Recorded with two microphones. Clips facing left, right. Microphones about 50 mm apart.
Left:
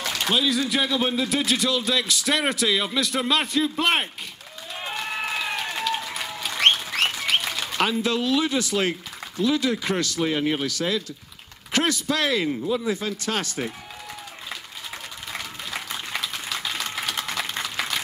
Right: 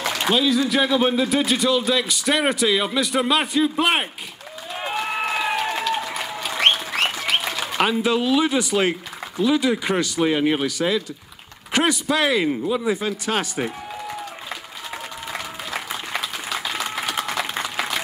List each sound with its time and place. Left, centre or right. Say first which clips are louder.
0.0 s a sound: right 4 dB; right
0.3 s a man's voice: right 4 dB; centre
4.7 s applause: right 5 dB; centre
9.4 s a man's voice: right 3 dB; centre
15.3 s applause: right 3 dB; centre